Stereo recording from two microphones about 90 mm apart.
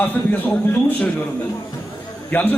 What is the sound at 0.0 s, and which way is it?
A man's voice, 20° left (ahead or behind).